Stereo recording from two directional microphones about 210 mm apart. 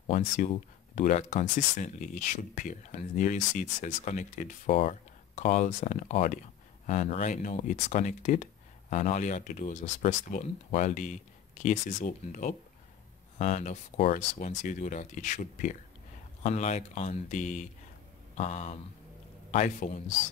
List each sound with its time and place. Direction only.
0.0 s speech: 35° left (ahead or behind)